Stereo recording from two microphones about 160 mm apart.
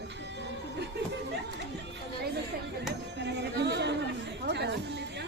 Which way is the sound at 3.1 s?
90° right.